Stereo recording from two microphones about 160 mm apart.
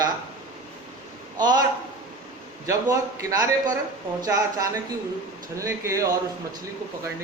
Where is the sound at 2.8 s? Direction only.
20° right (ahead or behind).